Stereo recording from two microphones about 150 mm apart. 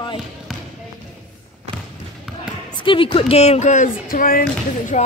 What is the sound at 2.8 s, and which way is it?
Speech, 35° left (ahead or behind).